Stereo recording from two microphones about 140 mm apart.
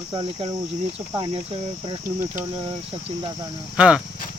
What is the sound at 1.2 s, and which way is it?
Speech, 40° right (ahead or behind).